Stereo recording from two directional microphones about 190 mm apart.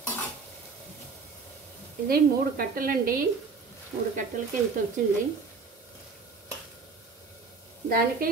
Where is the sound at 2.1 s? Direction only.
50° right (ahead or behind).